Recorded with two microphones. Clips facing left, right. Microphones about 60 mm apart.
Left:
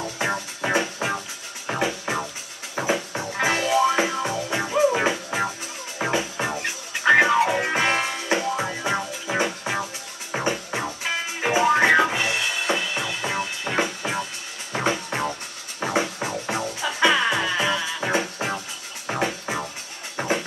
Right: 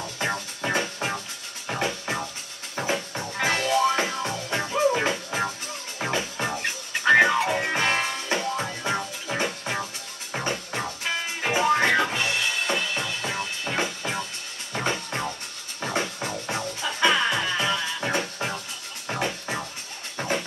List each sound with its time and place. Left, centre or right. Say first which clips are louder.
0.0 s music: left 3 dB; centre